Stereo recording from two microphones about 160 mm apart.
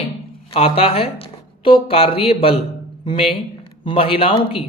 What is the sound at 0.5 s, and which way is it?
Speech, 35° left (ahead or behind).